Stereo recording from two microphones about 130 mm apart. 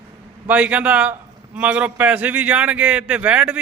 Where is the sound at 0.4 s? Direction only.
10° right (ahead or behind).